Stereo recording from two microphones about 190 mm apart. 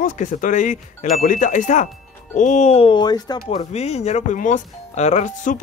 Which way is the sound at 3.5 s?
35° left (ahead or behind).